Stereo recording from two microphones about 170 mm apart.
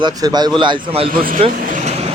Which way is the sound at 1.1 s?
55° right (ahead or behind).